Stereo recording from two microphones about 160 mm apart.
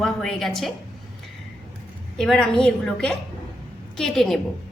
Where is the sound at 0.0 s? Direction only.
5° left (ahead or behind).